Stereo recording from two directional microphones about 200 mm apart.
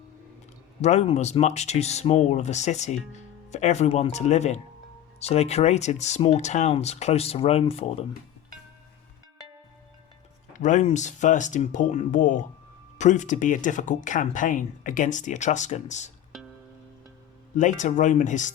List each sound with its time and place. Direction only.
0.8 s speech: 35° left (ahead or behind)
10.5 s speech: 40° left (ahead or behind)
16.3 s music: centre (ahead or behind)
17.6 s speech: 40° left (ahead or behind)